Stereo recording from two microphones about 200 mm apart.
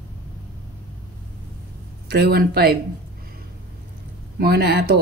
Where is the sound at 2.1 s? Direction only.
55° right (ahead or behind).